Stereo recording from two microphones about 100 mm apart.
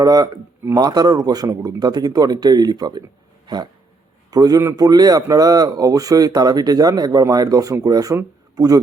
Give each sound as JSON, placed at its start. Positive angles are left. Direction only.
{"t": 0.0, "sound": "speech", "side_deg": -40}
{"t": 3.4, "sound": "a sound", "side_deg": -45}
{"t": 4.3, "sound": "speech", "side_deg": -40}